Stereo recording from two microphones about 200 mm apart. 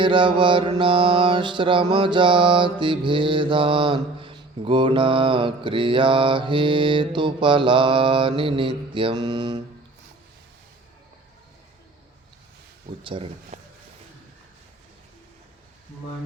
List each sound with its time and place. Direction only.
0.0 s mantra: 25° right (ahead or behind)
13.0 s mantra: 25° right (ahead or behind)
13.5 s a sound: 35° right (ahead or behind)